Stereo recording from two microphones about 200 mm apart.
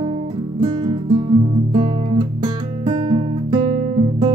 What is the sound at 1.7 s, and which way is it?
Guitar, 25° right (ahead or behind).